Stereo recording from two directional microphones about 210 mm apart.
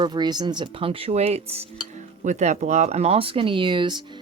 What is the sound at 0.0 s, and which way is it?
Speech, 20° right (ahead or behind).